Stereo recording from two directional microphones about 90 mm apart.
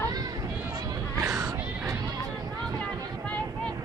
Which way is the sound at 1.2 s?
35° right (ahead or behind).